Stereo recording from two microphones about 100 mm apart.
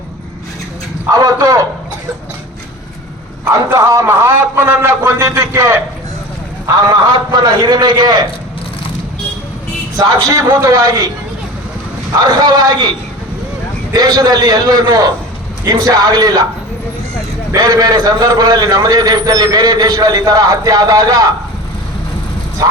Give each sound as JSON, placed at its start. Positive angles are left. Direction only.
{"t": 1.1, "sound": "a sound", "side_deg": -35}
{"t": 3.7, "sound": "a man's voice", "side_deg": -30}
{"t": 6.8, "sound": "a man's voice", "side_deg": -40}
{"t": 10.0, "sound": "a man's voice", "side_deg": -35}
{"t": 12.2, "sound": "a man's voice", "side_deg": -40}
{"t": 13.9, "sound": "a man's voice", "side_deg": -40}
{"t": 17.5, "sound": "a man's voice", "side_deg": -35}